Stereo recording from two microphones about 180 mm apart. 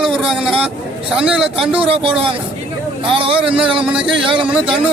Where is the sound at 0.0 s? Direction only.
Centre (ahead or behind).